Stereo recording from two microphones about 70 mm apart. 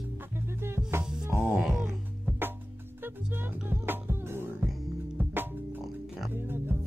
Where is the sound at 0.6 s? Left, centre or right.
Right.